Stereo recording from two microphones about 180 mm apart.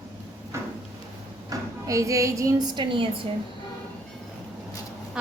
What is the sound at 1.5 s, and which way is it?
A woman's voice, 15° right (ahead or behind).